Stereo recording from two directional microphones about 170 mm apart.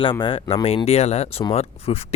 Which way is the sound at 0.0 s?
30° left (ahead or behind).